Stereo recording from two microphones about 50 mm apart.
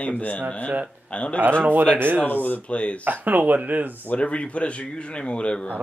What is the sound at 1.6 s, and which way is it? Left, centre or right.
Speech, right.